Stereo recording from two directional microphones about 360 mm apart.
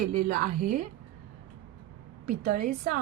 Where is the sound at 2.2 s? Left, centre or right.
Right.